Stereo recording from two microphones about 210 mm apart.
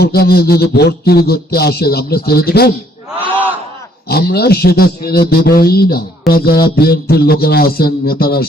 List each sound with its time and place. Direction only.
0.0 s a man's voice: 50° left (ahead or behind)
4.1 s a man's voice: 50° left (ahead or behind)